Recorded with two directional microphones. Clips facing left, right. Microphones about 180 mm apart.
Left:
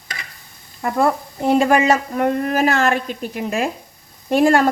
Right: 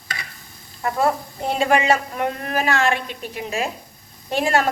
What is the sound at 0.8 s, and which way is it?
Speech, 45° left (ahead or behind).